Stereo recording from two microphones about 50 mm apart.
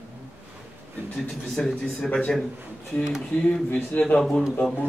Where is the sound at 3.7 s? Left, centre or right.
Left.